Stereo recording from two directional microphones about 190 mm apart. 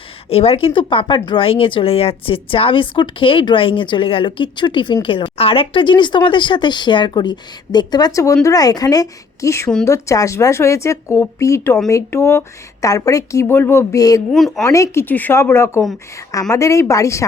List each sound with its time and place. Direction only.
0.3 s a woman's voice: 30° left (ahead or behind)
14.3 s speech: centre (ahead or behind)
14.6 s a woman's voice: 15° left (ahead or behind)